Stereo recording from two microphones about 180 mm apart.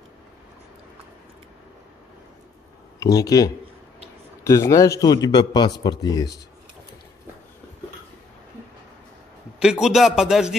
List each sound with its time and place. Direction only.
3.0 s a man's voice: 20° left (ahead or behind)
9.6 s a man's voice: 5° right (ahead or behind)